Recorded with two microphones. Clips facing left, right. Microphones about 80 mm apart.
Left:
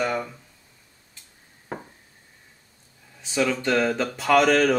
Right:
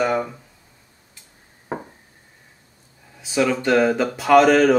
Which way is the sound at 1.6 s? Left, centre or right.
Right.